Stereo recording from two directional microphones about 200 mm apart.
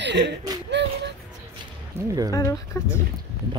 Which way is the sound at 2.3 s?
15° left (ahead or behind).